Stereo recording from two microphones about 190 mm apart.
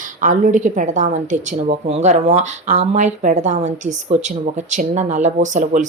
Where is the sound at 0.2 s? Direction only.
40° right (ahead or behind).